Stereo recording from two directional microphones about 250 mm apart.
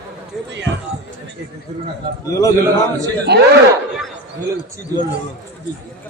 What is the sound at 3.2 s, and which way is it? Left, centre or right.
Speech, right.